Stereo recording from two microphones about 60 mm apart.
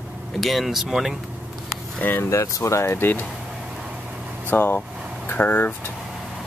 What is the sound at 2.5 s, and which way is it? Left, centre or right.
Speech, left.